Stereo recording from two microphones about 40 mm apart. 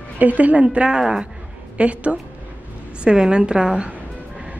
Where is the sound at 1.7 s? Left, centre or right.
Right.